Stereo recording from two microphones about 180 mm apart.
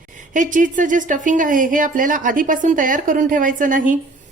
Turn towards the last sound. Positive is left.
turn(degrees=-45)  # may be behind; listen again after turning